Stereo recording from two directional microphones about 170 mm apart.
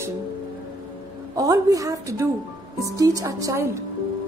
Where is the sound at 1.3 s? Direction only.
20° right (ahead or behind).